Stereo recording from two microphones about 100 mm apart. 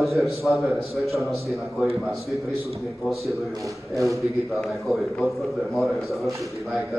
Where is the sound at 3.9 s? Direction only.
30° right (ahead or behind).